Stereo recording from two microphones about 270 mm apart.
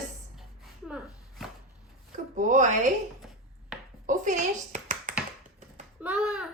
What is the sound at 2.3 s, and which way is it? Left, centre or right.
Speech, right.